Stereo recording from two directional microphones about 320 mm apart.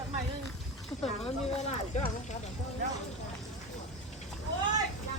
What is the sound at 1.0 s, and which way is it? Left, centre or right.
Speech, centre.